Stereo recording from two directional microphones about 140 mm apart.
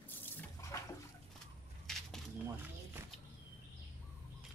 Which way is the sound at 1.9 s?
5° left (ahead or behind).